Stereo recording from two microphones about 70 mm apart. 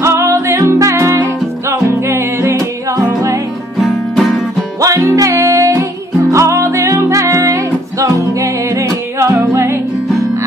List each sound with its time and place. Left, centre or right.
0.0 s music: right
3.8 s music: centre
4.7 s music: right